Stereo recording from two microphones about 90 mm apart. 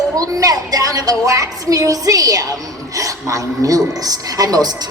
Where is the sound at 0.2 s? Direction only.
40° right (ahead or behind).